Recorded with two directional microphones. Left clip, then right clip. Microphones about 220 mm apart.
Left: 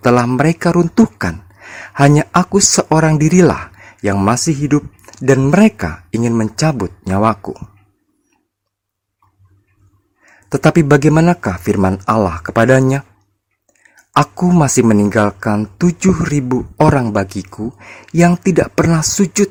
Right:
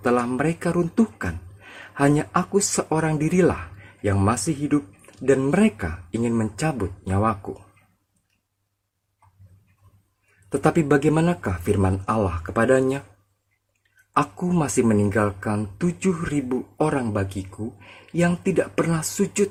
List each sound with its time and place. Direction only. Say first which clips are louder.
0.0 s speech: left 9 dB; 40° left (ahead or behind)
10.5 s speech: left 8 dB; 40° left (ahead or behind)